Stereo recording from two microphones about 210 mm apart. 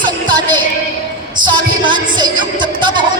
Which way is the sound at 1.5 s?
20° right (ahead or behind).